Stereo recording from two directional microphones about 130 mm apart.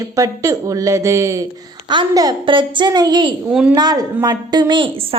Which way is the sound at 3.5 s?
10° right (ahead or behind).